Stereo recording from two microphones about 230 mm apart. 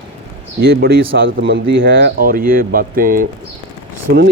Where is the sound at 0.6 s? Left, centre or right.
Right.